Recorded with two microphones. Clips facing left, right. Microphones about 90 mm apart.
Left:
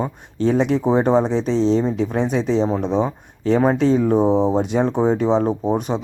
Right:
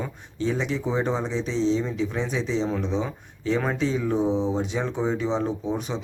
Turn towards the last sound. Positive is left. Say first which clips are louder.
# left 8 dB
turn(degrees=45)  # may be behind; listen again after turning